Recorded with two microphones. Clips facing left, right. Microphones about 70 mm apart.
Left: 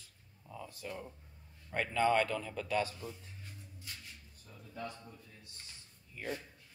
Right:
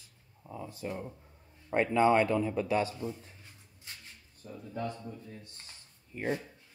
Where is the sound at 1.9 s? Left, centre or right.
Right.